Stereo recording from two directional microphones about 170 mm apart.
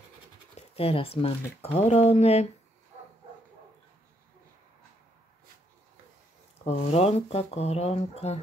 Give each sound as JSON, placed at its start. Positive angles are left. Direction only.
{"t": 0.6, "sound": "speech", "side_deg": 35}
{"t": 6.6, "sound": "speech", "side_deg": 40}